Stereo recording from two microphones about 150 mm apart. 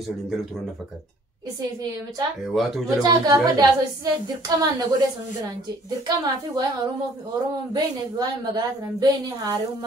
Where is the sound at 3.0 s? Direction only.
25° right (ahead or behind).